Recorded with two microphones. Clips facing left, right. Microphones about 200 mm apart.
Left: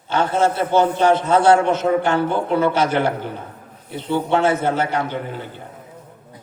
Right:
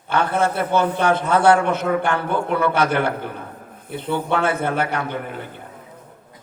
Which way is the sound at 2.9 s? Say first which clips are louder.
Left 2 dB; 55° right (ahead or behind).